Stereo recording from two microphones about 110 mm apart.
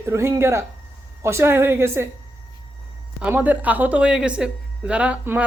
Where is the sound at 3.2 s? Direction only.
15° right (ahead or behind).